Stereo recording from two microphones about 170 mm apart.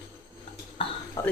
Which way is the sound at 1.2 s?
20° left (ahead or behind).